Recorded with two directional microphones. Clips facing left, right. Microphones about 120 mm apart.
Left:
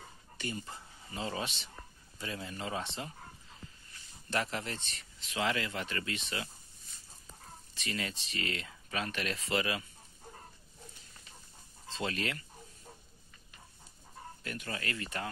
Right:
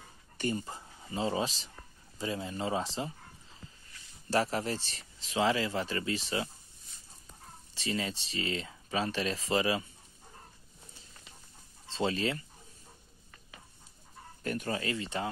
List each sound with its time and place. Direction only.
0.6 s speech: 30° right (ahead or behind)
4.3 s speech: 35° right (ahead or behind)
7.7 s speech: 30° right (ahead or behind)
11.9 s speech: 30° right (ahead or behind)
14.4 s speech: 40° right (ahead or behind)
14.8 s speech: 25° right (ahead or behind)